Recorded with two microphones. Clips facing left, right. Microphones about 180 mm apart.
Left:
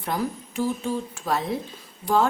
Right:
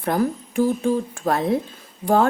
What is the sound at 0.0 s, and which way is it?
A woman's voice, 55° right (ahead or behind).